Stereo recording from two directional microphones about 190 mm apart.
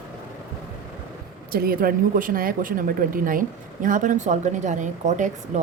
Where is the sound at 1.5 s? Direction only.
50° right (ahead or behind).